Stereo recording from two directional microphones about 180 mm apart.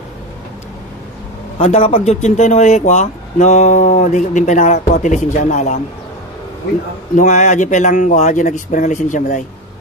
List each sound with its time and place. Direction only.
1.6 s speech: 35° left (ahead or behind)
7.2 s a man's voice: 40° left (ahead or behind)